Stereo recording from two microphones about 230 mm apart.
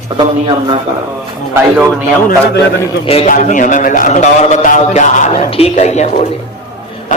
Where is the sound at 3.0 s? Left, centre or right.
Left.